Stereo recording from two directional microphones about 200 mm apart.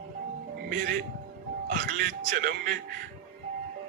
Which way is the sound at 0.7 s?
40° right (ahead or behind).